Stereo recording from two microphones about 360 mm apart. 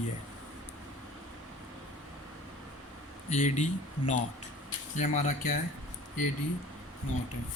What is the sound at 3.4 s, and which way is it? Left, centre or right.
Speech, centre.